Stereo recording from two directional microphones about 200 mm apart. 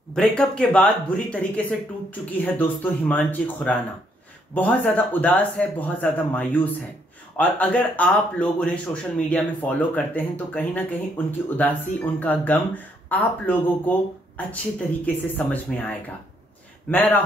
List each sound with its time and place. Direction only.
0.1 s speech: 5° left (ahead or behind)